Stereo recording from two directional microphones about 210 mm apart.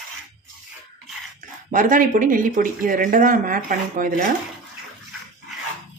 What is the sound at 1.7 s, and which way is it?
Speech, 40° right (ahead or behind).